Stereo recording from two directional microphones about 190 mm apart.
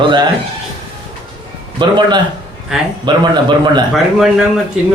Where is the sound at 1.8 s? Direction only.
25° right (ahead or behind).